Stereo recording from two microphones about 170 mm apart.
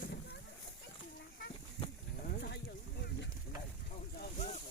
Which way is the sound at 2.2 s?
75° left (ahead or behind).